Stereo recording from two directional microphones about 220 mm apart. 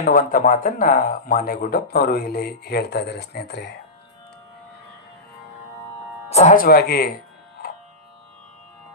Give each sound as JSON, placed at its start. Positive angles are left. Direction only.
{"t": 0.0, "sound": "speech", "side_deg": 40}
{"t": 6.3, "sound": "speech", "side_deg": 35}